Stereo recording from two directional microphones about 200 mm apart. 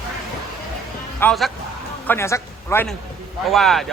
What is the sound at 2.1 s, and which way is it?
Speech, 15° left (ahead or behind).